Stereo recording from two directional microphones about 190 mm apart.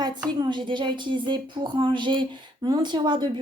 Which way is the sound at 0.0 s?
20° right (ahead or behind).